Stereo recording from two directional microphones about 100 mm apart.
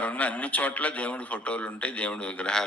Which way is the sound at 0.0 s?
15° left (ahead or behind).